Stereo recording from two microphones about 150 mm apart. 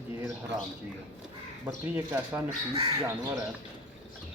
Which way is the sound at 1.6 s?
10° right (ahead or behind).